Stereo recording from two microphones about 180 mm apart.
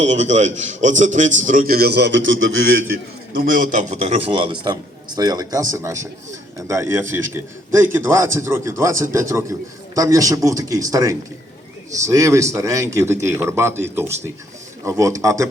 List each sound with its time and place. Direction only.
0.0 s a man's voice: 40° right (ahead or behind); by 2.7 s 90° right
3.3 s a man's voice: 50° right (ahead or behind); by 15.4 s 15° right (ahead or behind)